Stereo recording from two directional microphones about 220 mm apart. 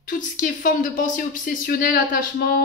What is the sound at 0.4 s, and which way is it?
Speech, 35° left (ahead or behind).